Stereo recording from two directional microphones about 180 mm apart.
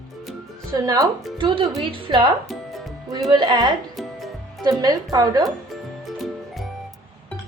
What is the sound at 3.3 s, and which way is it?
Speech, 25° right (ahead or behind).